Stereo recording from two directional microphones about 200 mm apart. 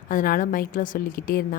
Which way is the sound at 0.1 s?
40° left (ahead or behind).